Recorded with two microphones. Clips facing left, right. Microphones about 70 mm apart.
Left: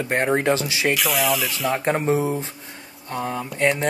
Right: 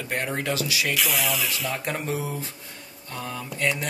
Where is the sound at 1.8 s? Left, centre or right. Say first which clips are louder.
Left 8 dB; left.